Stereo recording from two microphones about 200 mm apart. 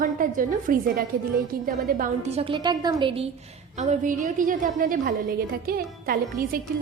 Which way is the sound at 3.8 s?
40° right (ahead or behind).